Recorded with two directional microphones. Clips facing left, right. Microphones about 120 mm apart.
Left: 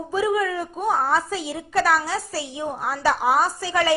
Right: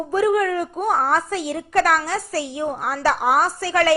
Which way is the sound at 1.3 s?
15° left (ahead or behind).